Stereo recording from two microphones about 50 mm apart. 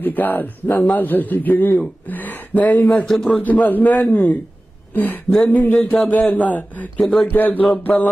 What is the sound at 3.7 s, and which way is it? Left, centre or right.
A man's voice, left.